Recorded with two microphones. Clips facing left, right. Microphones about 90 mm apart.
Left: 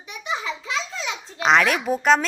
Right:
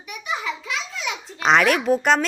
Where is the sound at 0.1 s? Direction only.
30° left (ahead or behind).